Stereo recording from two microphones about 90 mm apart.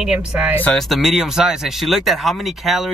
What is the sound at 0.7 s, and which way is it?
Speech, centre (ahead or behind).